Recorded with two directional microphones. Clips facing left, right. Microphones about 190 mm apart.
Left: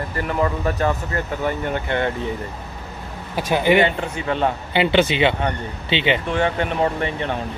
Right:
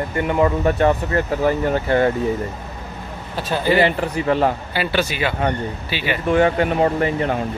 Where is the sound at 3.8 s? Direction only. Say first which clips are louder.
Right 1 dB; 35° right (ahead or behind).